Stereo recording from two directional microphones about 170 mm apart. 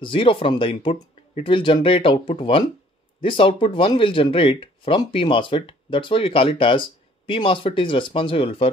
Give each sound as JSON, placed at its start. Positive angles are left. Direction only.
{"t": 0.0, "sound": "speech", "side_deg": 30}